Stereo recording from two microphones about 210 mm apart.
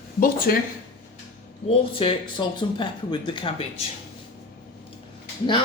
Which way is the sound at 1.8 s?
25° left (ahead or behind).